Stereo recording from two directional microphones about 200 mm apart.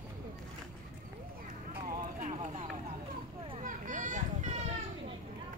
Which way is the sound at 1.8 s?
40° right (ahead or behind).